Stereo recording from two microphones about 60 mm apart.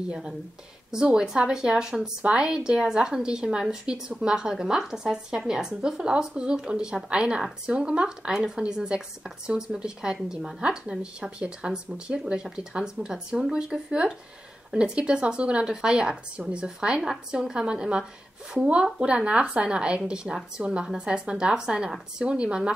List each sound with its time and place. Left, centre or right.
0.9 s a woman's voice: centre